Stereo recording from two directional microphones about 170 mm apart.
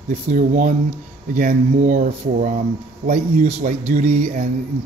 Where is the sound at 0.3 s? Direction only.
50° right (ahead or behind).